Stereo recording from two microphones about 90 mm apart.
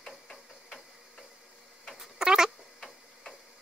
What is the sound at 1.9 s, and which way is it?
Tick-tock, 5° right (ahead or behind).